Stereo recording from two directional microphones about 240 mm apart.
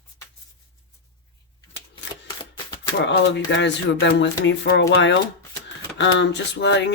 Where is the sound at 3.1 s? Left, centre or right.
Left.